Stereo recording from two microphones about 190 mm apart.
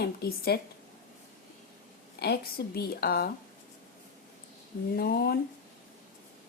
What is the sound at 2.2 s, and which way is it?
Speech, 55° left (ahead or behind).